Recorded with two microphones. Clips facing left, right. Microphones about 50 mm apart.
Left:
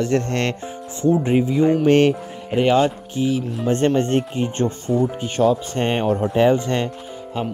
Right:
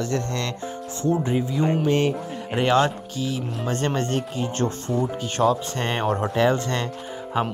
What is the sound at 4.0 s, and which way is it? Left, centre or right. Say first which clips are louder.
Speech: left 5 dB; left.